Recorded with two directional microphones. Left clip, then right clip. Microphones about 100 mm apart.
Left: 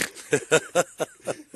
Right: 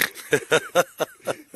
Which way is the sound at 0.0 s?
30° left (ahead or behind).